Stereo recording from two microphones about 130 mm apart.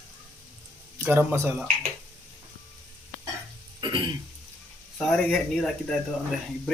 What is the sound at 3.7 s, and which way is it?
Throat clearing, 35° right (ahead or behind).